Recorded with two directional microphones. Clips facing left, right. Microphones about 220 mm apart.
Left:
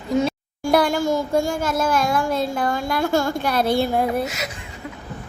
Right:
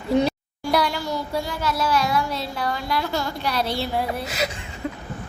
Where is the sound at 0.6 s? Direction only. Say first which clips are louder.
Left 5 dB; 50° left (ahead or behind).